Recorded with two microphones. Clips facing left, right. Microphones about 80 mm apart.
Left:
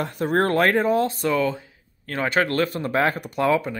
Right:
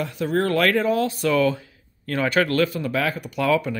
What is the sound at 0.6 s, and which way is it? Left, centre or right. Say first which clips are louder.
Speech: even; left.